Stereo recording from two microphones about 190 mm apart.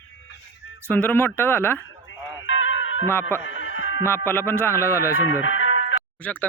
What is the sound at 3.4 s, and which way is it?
Music, 85° left.